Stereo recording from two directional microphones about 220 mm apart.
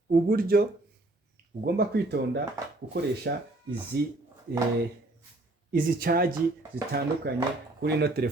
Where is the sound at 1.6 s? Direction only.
45° right (ahead or behind).